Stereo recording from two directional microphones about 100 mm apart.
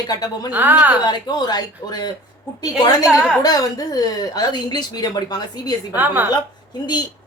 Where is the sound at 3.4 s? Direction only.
40° left (ahead or behind).